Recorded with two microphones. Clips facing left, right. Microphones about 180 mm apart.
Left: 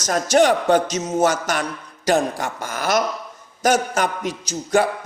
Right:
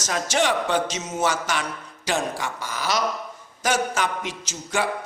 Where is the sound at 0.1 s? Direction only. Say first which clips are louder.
Left 7 dB; 45° left (ahead or behind).